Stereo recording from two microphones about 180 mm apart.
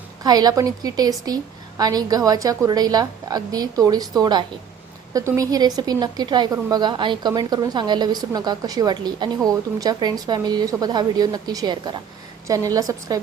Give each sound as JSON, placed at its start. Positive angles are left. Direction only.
{"t": 0.2, "sound": "a woman's voice", "side_deg": -20}